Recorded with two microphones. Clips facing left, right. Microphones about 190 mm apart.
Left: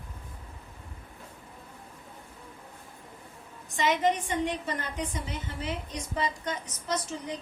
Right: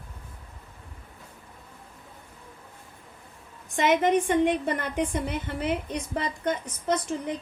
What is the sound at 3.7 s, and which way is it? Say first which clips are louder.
A woman's voice: right 4 dB; 55° right (ahead or behind).